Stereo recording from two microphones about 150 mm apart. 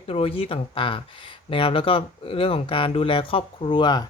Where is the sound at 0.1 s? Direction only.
40° left (ahead or behind).